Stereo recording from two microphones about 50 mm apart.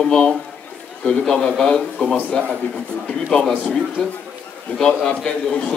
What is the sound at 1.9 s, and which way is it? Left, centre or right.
Speech, left.